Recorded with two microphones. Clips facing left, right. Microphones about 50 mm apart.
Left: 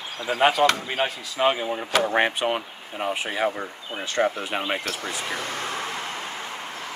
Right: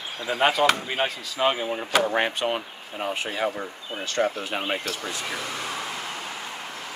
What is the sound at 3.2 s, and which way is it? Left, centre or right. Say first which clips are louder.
Speech: left 2 dB; centre.